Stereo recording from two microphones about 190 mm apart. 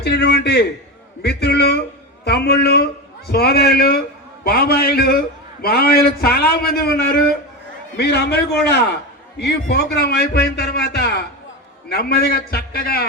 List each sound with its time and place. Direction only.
0.0 s a man's voice: 60° left (ahead or behind)